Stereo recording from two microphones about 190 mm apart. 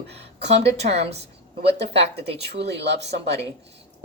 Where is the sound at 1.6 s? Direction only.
60° right (ahead or behind).